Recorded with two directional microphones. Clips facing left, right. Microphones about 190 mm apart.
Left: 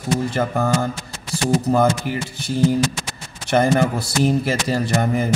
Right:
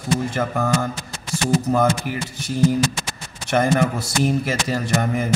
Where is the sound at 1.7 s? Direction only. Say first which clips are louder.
Left 2 dB; 30° left (ahead or behind).